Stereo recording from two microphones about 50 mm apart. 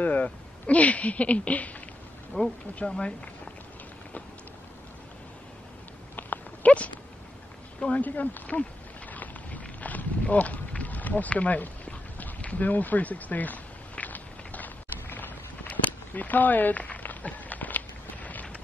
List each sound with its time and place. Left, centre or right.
0.0 s speech: left
6.1 s dog: left
7.9 s a sound: left